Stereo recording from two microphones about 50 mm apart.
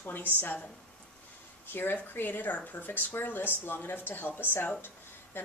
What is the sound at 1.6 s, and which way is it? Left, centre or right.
A woman's voice, left.